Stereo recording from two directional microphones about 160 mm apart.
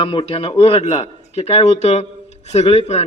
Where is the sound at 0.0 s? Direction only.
35° left (ahead or behind).